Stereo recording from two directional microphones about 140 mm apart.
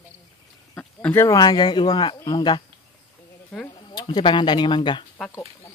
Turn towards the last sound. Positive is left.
turn(degrees=35)  # may be behind; listen again after turning